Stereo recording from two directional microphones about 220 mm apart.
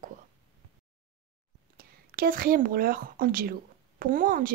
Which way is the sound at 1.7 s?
45° right (ahead or behind).